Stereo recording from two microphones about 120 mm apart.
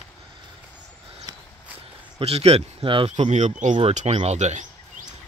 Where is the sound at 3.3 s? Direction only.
85° right.